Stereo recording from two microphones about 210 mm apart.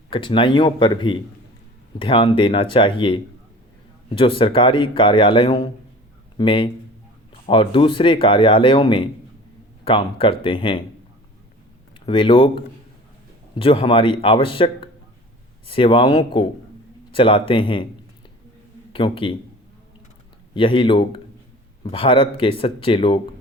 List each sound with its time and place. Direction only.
0.1 s speech: 25° left (ahead or behind)
11.9 s speech: 25° left (ahead or behind)
18.9 s speech: 25° left (ahead or behind)
20.5 s speech: 25° left (ahead or behind)